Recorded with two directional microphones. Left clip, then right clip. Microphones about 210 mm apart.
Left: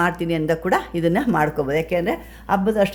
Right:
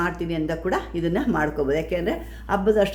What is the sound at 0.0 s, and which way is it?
Speech, 35° left (ahead or behind).